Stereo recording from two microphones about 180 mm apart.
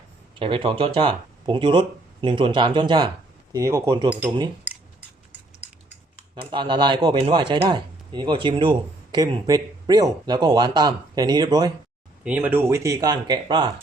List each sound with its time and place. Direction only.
0.3 s speech: 30° right (ahead or behind)
6.3 s speech: 25° right (ahead or behind)
12.2 s speech: 10° right (ahead or behind)